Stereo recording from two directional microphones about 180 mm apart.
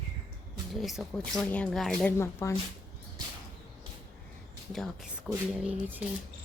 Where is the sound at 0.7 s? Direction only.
Centre (ahead or behind); by 2.6 s 15° left (ahead or behind).